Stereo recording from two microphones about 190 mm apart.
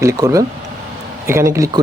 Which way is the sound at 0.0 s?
15° right (ahead or behind).